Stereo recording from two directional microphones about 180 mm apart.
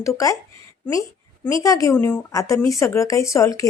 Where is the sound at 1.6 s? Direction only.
20° left (ahead or behind).